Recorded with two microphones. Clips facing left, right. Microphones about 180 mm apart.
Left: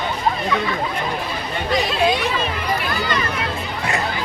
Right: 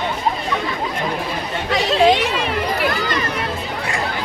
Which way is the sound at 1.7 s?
85° right.